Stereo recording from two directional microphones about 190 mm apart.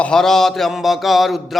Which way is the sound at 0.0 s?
5° left (ahead or behind).